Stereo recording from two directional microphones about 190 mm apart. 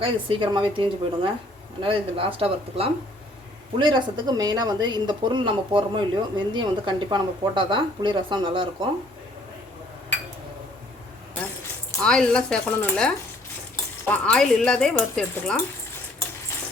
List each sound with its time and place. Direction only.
0.0 s speech: 25° right (ahead or behind)
11.9 s speech: 5° left (ahead or behind)